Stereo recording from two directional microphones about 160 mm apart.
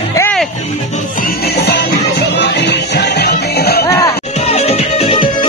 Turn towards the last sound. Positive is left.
turn(degrees=35)  # may be behind; listen again after turning